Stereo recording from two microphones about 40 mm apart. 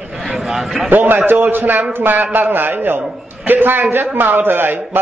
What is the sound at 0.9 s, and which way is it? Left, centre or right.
A man's voice, right.